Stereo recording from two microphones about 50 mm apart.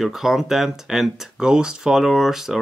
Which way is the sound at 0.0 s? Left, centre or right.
Centre.